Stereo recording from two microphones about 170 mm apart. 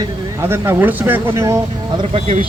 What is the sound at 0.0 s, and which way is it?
Speech, 15° right (ahead or behind).